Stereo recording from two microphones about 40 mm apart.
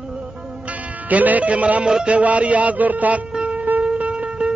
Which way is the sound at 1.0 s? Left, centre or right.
Right.